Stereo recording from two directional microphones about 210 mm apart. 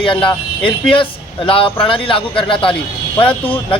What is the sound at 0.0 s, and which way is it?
Speech, 25° left (ahead or behind).